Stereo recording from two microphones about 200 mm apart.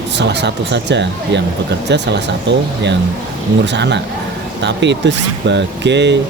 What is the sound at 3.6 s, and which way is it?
Speech, 60° right (ahead or behind).